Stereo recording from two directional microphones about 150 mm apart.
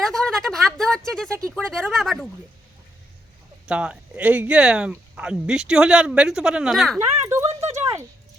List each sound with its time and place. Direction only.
0.0 s speech: 5° left (ahead or behind)
3.7 s speech: 10° right (ahead or behind)
7.2 s a sound: 20° right (ahead or behind)